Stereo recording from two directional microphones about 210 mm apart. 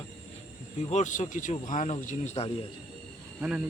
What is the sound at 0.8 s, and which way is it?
Speech, 30° left (ahead or behind).